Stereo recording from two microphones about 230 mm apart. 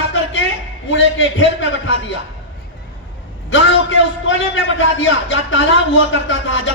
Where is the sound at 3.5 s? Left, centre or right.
Left.